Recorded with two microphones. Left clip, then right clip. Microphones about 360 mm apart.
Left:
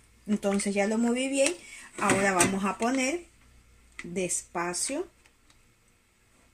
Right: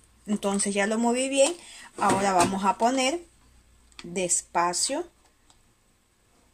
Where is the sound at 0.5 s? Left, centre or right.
Right.